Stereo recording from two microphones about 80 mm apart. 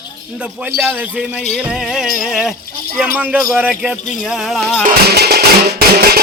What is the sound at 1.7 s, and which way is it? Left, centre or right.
Speech, centre.